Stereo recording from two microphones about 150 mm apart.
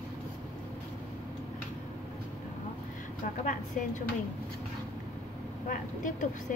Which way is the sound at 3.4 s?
55° left (ahead or behind).